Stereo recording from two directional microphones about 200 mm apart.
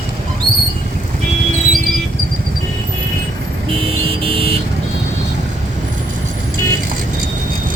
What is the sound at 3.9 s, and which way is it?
Vehicle, 30° right (ahead or behind).